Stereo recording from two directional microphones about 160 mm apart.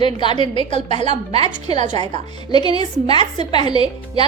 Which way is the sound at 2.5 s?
25° left (ahead or behind).